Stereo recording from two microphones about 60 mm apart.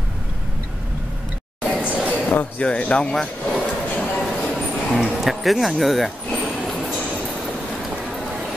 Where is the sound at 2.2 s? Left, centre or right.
Left.